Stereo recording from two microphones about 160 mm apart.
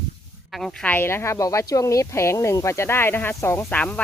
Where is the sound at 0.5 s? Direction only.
5° left (ahead or behind).